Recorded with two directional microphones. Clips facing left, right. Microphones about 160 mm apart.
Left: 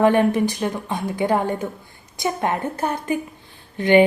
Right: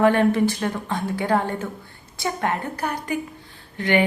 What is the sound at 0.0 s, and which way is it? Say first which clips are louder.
A woman's voice: left 1 dB; 15° left (ahead or behind).